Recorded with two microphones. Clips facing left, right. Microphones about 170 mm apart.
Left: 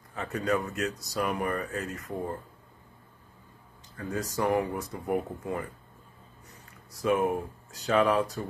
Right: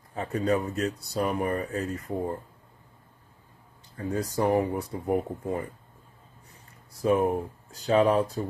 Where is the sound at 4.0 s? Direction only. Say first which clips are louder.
Right 3 dB; 35° right (ahead or behind).